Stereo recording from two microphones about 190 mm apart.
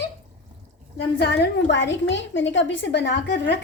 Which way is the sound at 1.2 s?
65° left (ahead or behind).